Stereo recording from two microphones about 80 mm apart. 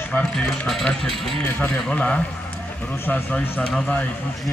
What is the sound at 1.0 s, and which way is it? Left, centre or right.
Speech, centre.